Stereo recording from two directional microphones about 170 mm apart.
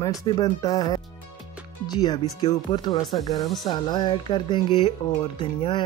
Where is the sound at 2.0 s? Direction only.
25° left (ahead or behind).